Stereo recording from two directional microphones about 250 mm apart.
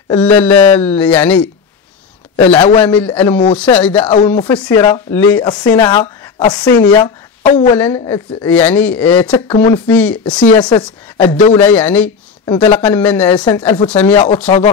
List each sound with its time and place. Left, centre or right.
0.3 s speech: centre
2.3 s speech: left
9.3 s speech: left
9.8 s speech: centre
10.2 s speech: centre
11.6 s speech: centre
12.5 s speech: left
13.0 s speech: centre